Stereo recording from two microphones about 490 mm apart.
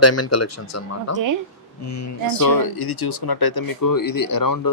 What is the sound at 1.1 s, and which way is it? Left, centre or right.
Speech, right.